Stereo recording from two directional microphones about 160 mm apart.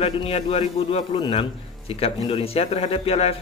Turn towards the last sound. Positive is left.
turn(degrees=40)  # may be behind; listen again after turning